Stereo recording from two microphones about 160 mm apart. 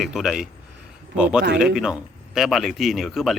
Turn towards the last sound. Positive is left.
turn(degrees=0)  # may be behind; listen again after turning